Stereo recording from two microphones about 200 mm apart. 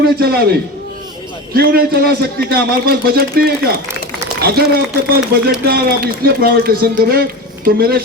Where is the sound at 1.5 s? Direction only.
50° right (ahead or behind).